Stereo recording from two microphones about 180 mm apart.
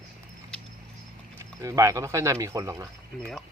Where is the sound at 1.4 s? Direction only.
20° right (ahead or behind).